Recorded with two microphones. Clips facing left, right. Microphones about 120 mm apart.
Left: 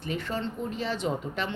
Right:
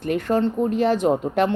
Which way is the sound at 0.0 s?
50° right (ahead or behind).